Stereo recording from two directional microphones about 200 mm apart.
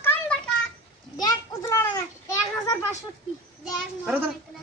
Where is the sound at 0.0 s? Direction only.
10° left (ahead or behind).